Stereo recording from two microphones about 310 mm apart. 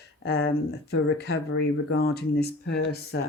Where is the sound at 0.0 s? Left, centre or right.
Left.